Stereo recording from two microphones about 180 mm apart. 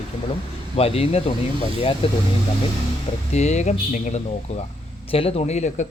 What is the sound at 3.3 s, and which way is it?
Speech, 40° left (ahead or behind).